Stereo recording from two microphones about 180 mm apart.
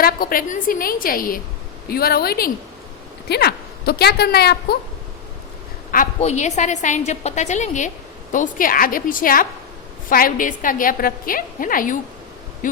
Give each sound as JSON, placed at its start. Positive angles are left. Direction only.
{"t": 0.0, "sound": "a woman's voice", "side_deg": 55}
{"t": 6.1, "sound": "a woman's voice", "side_deg": 40}